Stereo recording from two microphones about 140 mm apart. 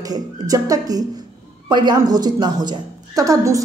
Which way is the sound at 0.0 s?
25° right (ahead or behind).